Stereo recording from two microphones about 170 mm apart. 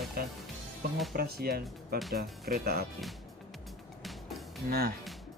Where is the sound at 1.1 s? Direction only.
65° right (ahead or behind).